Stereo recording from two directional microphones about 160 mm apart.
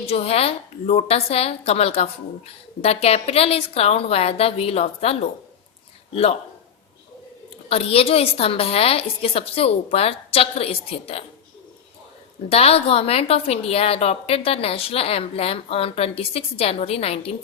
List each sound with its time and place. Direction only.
0.0 s a woman's voice: 40° left (ahead or behind)
7.7 s a woman's voice: 40° left (ahead or behind)
12.5 s a woman's voice: 40° left (ahead or behind)